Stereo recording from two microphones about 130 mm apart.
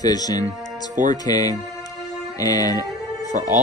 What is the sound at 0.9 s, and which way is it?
Speech, 75° right (ahead or behind).